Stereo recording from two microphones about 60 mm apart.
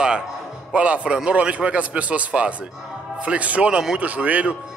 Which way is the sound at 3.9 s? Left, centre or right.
Right.